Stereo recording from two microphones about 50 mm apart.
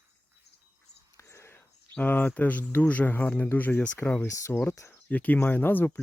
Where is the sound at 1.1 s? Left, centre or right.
Left.